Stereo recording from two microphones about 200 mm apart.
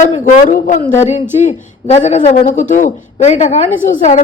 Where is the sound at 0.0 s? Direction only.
40° left (ahead or behind).